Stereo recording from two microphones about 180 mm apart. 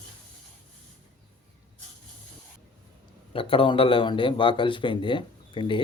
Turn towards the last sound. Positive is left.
turn(degrees=25)  # may be behind; listen again after turning